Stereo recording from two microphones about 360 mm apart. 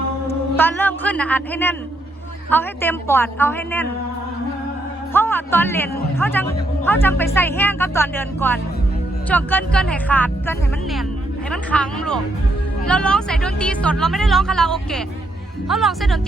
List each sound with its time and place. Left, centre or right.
0.5 s a woman's voice: centre
5.1 s speech: centre
11.5 s speech: centre